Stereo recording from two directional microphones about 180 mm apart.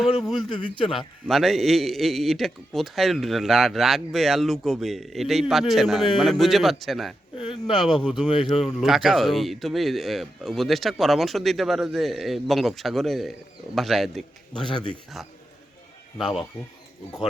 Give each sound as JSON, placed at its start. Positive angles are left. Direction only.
{"t": 0.0, "sound": "a man's voice", "side_deg": 0}
{"t": 7.3, "sound": "speech", "side_deg": 30}
{"t": 7.7, "sound": "a man's voice", "side_deg": 0}
{"t": 16.1, "sound": "a man's voice", "side_deg": 0}